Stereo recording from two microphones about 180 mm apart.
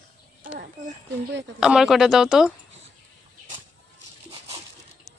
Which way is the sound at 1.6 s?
5° right (ahead or behind).